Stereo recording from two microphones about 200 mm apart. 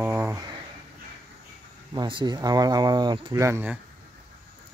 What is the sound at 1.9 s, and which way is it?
Speech, 25° right (ahead or behind).